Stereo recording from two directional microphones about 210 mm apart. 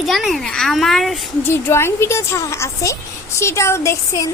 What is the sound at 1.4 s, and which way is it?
A woman's voice, 10° left (ahead or behind).